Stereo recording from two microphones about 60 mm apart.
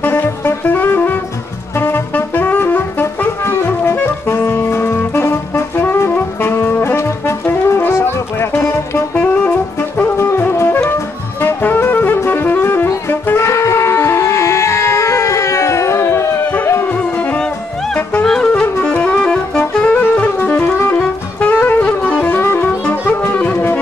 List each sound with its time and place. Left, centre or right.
0.0 s saxophone: left
1.8 s music: left
6.8 s music: left
10.1 s music: left
11.4 s music: left
12.3 s saxophone: left
13.4 s a sound: left
18.2 s music: centre
18.5 s saxophone: left
19.6 s music: left
20.9 s saxophone: left
22.4 s music: left
23.3 s music: left